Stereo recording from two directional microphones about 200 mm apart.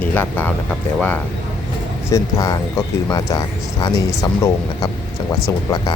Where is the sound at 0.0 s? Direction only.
10° left (ahead or behind).